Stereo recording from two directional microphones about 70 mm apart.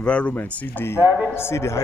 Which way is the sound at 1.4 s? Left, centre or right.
Left.